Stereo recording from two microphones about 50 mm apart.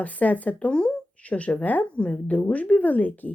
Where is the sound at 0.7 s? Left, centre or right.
Centre.